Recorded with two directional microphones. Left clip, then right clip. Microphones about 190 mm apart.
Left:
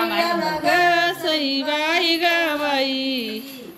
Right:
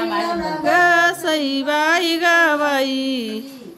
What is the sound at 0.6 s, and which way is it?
Female singing, 10° right (ahead or behind).